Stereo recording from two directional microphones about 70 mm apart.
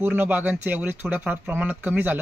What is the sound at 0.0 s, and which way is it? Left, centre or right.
Speech, right.